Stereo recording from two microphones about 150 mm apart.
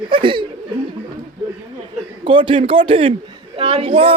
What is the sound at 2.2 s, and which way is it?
A man's voice, 35° right (ahead or behind).